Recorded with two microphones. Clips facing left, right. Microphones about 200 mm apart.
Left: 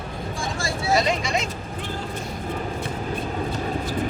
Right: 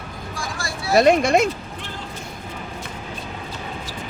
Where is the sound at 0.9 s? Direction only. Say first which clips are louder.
Right 8 dB; 55° right (ahead or behind).